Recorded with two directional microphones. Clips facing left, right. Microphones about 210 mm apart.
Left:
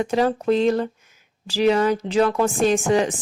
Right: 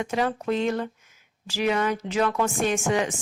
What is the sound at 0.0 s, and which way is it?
Speech, 35° left (ahead or behind).